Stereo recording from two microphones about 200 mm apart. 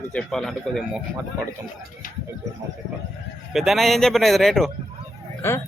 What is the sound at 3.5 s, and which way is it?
Speech, centre (ahead or behind).